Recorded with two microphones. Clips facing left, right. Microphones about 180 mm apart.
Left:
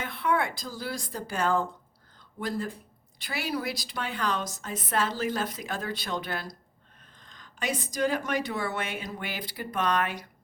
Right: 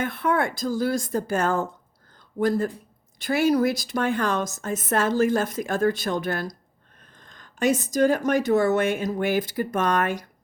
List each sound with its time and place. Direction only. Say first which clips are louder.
0.0 s speech: right 4 dB; 45° right (ahead or behind)